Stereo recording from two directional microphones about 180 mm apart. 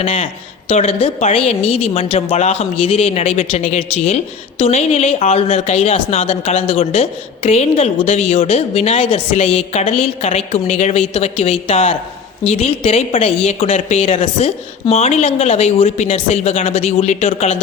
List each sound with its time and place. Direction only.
0.0 s a man's voice: 40° left (ahead or behind)